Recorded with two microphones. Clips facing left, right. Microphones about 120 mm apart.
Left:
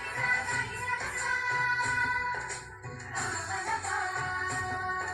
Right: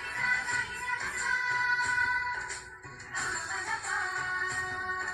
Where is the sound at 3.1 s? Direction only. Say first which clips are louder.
Left 2 dB; 55° left (ahead or behind).